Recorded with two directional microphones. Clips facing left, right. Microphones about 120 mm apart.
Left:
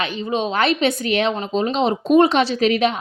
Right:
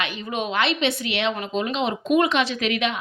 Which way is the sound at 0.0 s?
30° left (ahead or behind).